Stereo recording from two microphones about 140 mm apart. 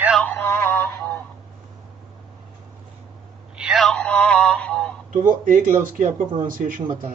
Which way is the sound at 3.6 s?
Centre (ahead or behind).